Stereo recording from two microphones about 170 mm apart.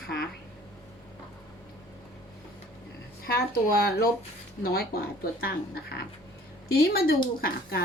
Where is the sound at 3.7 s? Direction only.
65° left (ahead or behind).